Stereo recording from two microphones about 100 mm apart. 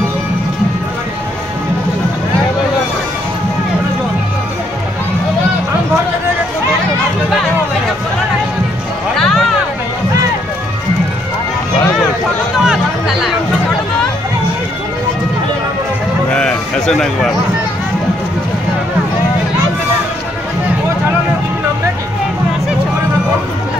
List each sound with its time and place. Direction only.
9.1 s music: 5° left (ahead or behind)
12.5 s music: 5° right (ahead or behind)
16.3 s a sound: 10° left (ahead or behind)